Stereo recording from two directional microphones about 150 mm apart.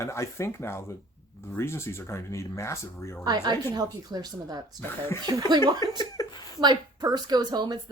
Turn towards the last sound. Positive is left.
turn(degrees=-25)  # may be behind; listen again after turning